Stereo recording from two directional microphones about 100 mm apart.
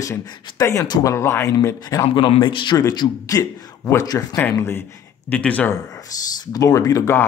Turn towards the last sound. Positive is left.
turn(degrees=30)  # may be behind; listen again after turning